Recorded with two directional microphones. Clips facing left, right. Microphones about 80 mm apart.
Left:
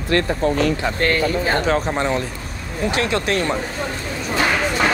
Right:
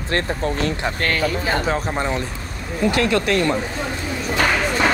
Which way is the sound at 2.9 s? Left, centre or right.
Left.